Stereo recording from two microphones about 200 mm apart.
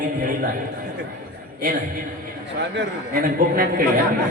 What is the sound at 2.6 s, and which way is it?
A man's voice, 55° right (ahead or behind).